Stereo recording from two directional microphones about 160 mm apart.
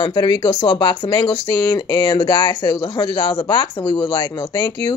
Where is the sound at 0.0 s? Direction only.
25° left (ahead or behind).